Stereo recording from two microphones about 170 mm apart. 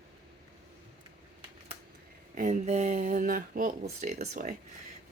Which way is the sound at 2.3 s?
45° right (ahead or behind).